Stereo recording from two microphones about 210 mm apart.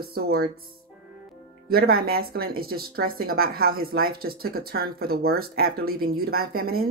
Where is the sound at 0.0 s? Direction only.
45° right (ahead or behind).